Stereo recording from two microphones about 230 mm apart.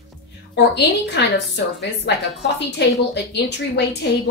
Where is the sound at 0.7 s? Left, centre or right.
Left.